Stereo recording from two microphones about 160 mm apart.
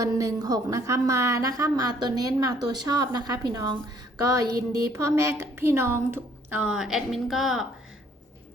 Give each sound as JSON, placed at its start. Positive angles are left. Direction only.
{"t": 0.0, "sound": "a woman's voice", "side_deg": -20}